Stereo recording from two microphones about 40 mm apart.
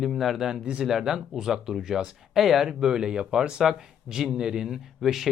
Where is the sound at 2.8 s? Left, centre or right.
Centre.